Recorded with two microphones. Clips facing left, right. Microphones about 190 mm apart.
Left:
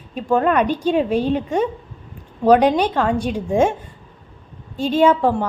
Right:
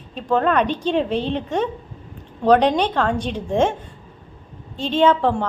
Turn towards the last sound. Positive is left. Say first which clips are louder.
# left 2 dB
turn(degrees=10)  # may be behind; listen again after turning